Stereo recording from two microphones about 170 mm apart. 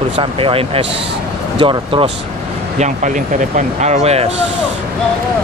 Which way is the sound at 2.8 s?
45° right (ahead or behind).